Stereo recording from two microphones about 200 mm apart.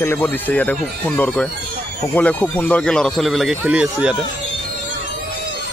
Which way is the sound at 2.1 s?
10° left (ahead or behind).